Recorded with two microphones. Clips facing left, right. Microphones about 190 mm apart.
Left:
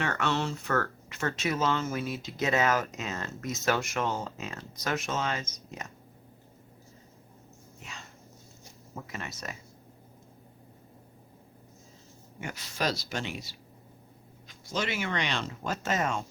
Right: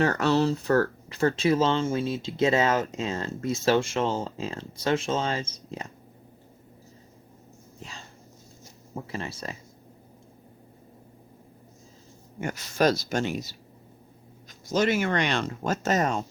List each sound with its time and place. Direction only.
0.0 s speech: 35° right (ahead or behind)
7.8 s dog: 35° right (ahead or behind)
9.0 s speech: 30° right (ahead or behind)
12.4 s speech: 45° right (ahead or behind)